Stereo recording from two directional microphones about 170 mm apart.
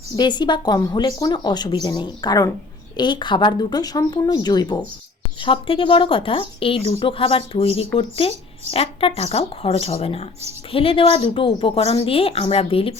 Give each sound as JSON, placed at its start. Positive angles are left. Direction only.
{"t": 0.2, "sound": "speech", "side_deg": 25}